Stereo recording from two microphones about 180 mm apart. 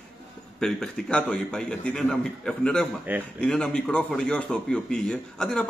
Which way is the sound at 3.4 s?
5° left (ahead or behind).